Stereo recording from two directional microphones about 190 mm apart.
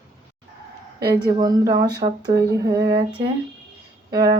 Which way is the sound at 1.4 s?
20° right (ahead or behind).